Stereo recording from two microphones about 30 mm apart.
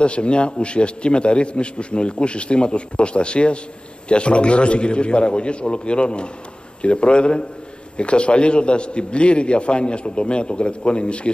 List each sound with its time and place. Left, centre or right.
0.0 s a man's voice: left